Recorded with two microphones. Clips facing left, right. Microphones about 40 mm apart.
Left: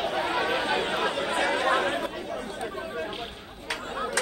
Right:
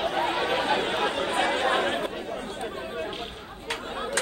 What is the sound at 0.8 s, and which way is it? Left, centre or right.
Chatter, right.